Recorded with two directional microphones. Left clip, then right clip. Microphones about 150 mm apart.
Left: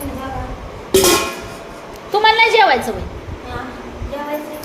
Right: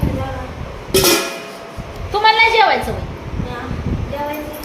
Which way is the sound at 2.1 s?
30° left (ahead or behind).